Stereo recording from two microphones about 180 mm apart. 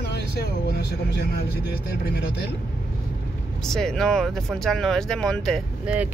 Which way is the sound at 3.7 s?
5° left (ahead or behind).